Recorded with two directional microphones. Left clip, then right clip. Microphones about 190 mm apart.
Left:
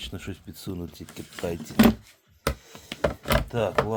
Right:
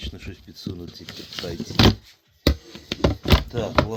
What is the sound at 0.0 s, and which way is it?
Speech, 55° left (ahead or behind).